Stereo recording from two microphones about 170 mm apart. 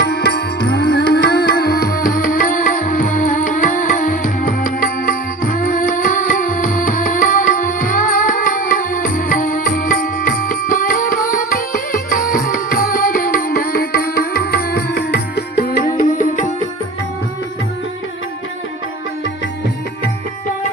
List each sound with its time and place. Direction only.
0.0 s music: 75° left (ahead or behind)
16.0 s music: 50° left (ahead or behind)